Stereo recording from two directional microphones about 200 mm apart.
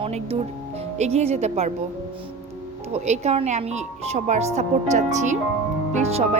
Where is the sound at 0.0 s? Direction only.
30° right (ahead or behind).